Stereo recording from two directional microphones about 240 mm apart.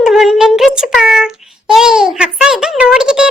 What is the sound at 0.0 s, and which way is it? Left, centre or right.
Child singing, centre.